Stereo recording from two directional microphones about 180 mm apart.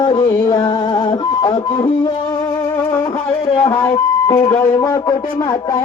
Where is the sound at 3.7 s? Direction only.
15° left (ahead or behind).